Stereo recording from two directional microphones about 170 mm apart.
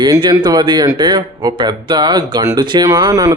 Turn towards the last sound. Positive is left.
turn(degrees=-20)  # may be behind; listen again after turning